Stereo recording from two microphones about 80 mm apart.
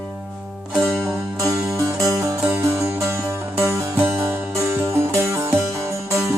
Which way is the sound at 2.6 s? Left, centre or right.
Right.